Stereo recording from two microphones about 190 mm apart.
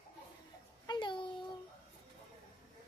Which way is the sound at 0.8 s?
25° left (ahead or behind).